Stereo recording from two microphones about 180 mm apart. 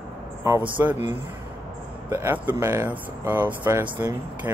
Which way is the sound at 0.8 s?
15° right (ahead or behind).